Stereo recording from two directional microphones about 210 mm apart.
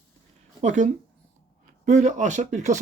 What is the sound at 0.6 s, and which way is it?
Speech, 35° right (ahead or behind).